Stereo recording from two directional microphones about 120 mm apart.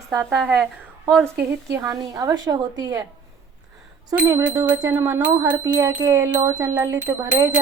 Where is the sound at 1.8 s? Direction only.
30° right (ahead or behind).